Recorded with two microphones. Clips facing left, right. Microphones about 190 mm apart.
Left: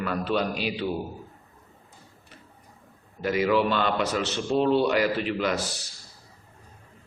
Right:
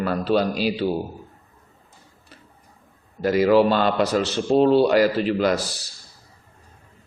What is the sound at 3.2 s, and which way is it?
A man's voice, 35° right (ahead or behind).